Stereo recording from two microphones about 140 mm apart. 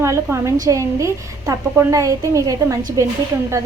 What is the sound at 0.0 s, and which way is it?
A woman's voice, 20° right (ahead or behind).